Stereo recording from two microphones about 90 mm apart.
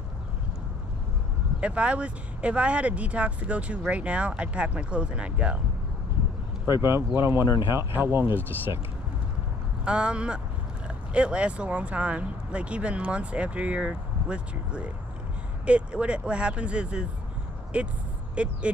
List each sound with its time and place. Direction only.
1.6 s speech: 15° right (ahead or behind)
6.7 s speech: 30° right (ahead or behind)
9.8 s speech: 10° right (ahead or behind)